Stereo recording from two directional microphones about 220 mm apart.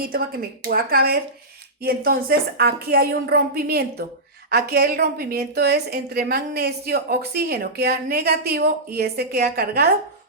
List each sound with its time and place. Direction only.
0.0 s a woman's voice: 40° right (ahead or behind)